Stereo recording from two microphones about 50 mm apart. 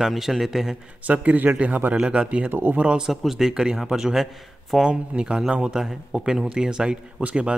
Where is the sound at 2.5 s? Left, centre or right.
Right.